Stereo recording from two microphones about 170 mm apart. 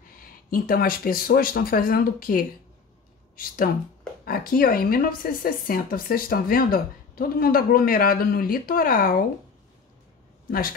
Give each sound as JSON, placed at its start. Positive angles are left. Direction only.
{"t": 0.5, "sound": "a woman's voice", "side_deg": 55}